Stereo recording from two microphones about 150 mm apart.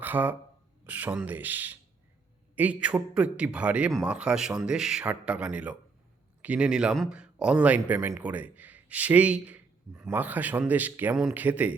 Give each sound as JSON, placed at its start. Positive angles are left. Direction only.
{"t": 0.0, "sound": "speech", "side_deg": -10}